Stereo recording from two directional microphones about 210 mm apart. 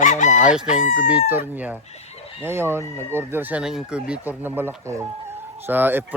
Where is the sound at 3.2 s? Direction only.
10° right (ahead or behind).